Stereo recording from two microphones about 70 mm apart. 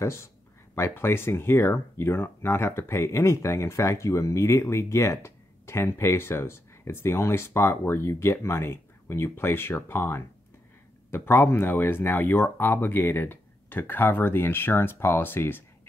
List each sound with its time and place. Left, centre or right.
0.0 s speech: left